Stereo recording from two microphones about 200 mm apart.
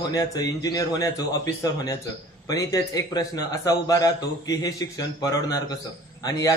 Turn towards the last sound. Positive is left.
turn(degrees=20)  # may be behind; listen again after turning